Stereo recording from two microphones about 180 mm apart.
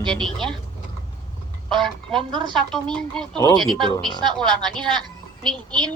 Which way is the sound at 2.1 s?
25° right (ahead or behind).